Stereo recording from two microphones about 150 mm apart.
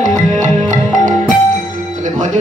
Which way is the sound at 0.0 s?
55° right (ahead or behind).